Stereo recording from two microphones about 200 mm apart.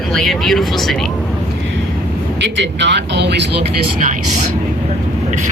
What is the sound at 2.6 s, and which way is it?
Speech, 60° right (ahead or behind).